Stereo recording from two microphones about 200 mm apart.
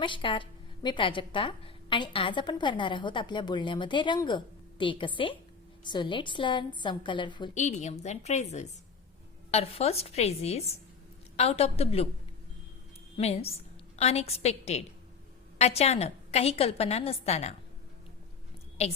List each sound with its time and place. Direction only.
0.0 s a woman's voice: 25° left (ahead or behind)
7.5 s a woman's voice: 35° left (ahead or behind)
13.1 s a woman's voice: 30° left (ahead or behind)
18.8 s a woman's voice: 30° left (ahead or behind)